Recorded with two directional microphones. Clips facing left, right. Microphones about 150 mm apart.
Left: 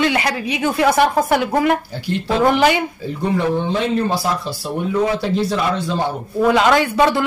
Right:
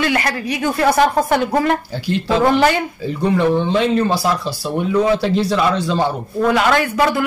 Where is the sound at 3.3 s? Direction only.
90° right.